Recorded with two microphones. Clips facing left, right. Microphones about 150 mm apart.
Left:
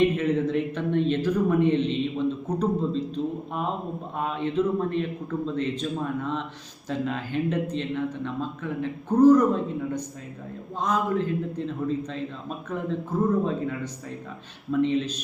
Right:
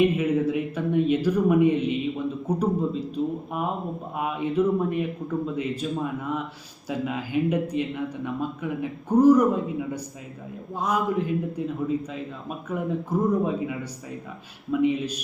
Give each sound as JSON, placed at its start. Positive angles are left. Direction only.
{"t": 0.0, "sound": "speech", "side_deg": -10}
{"t": 4.2, "sound": "speech", "side_deg": -10}